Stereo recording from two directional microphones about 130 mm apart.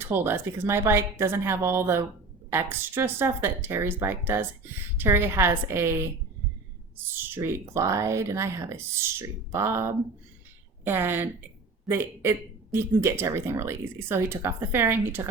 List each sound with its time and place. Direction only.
0.0 s speech: 15° right (ahead or behind)